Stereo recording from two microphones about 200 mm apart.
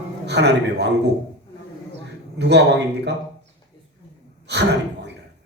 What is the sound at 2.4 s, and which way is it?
Speech, 60° right (ahead or behind).